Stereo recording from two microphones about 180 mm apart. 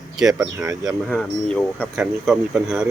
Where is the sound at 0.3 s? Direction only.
20° right (ahead or behind).